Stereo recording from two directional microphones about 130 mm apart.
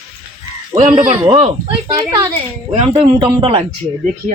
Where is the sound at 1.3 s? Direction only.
45° right (ahead or behind).